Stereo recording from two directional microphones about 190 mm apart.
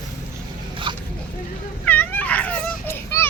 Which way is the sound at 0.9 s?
25° right (ahead or behind).